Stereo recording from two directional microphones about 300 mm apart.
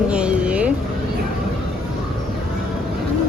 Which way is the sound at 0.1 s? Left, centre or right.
Centre.